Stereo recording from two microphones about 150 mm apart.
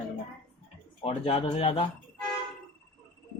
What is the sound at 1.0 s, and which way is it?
Speech, 40° left (ahead or behind).